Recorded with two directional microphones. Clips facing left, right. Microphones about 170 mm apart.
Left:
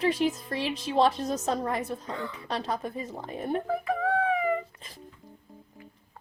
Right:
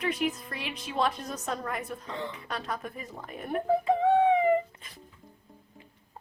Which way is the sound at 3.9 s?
25° right (ahead or behind).